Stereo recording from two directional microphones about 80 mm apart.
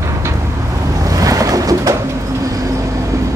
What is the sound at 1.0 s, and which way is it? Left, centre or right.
Boat, right.